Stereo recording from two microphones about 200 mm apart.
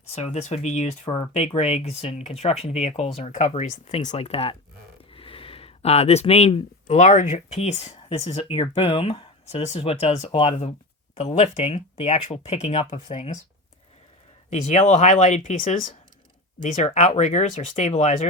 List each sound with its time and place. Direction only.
0.1 s speech: 35° left (ahead or behind)
14.5 s speech: 35° left (ahead or behind)